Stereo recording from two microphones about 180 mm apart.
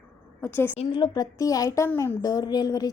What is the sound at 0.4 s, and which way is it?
Speech, 10° left (ahead or behind).